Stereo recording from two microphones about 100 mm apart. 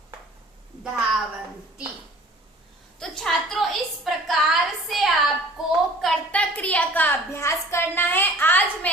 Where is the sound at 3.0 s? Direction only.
5° left (ahead or behind).